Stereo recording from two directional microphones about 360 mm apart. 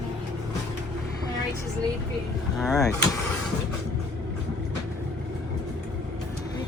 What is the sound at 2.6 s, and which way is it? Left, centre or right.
Speech, centre.